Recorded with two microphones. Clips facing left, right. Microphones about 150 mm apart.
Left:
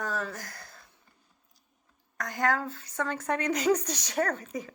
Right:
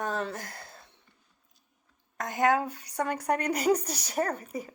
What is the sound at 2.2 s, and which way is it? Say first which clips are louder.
A woman's voice: right 3 dB; 20° right (ahead or behind).